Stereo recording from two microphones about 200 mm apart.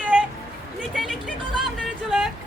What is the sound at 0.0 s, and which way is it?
Music, 5° right (ahead or behind).